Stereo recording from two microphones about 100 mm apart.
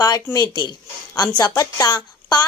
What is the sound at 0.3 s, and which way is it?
Speech, 40° left (ahead or behind).